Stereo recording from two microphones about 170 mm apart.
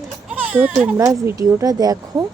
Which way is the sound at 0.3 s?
10° right (ahead or behind).